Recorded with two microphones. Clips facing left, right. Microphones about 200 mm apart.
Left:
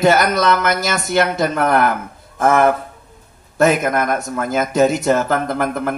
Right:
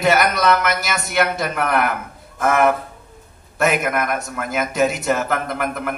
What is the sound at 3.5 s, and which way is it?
A man's voice, 30° left (ahead or behind).